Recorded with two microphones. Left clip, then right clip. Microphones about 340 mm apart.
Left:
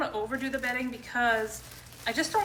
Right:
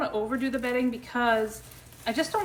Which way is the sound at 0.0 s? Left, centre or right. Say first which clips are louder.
Right 3 dB; centre.